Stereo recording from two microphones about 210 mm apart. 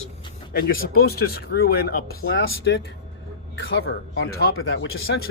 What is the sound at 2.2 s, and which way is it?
Speech, 65° left (ahead or behind).